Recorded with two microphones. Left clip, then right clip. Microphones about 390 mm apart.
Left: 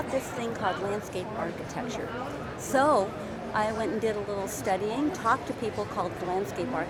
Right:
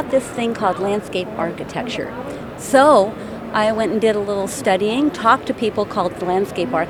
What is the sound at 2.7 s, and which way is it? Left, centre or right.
A woman's voice, right.